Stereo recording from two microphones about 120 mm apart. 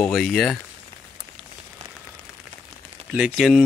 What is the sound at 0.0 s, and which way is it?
Speech, centre (ahead or behind).